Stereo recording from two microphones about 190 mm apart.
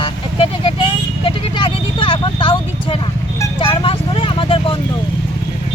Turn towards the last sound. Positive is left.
turn(degrees=30)  # may be behind; listen again after turning